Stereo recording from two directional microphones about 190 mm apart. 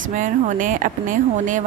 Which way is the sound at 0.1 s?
45° right (ahead or behind).